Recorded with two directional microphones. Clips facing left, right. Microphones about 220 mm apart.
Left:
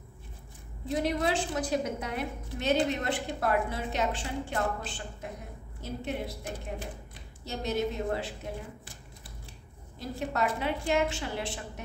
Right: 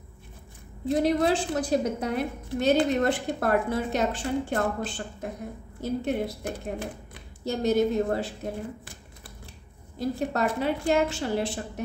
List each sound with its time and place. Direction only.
1.0 s a woman's voice: 35° right (ahead or behind)
9.9 s a woman's voice: 40° right (ahead or behind)